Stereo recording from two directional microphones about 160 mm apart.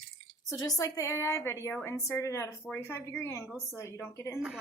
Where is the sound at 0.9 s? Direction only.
20° left (ahead or behind).